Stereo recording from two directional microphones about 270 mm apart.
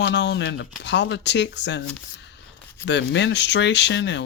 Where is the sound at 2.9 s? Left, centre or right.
Left.